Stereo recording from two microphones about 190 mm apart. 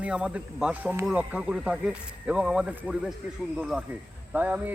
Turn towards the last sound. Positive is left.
turn(degrees=-10)  # may be behind; listen again after turning